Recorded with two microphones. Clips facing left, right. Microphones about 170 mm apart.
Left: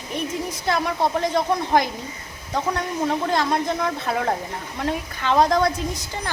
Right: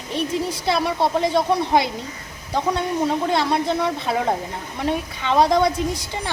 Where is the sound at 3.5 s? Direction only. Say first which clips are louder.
Right 2 dB; 15° right (ahead or behind).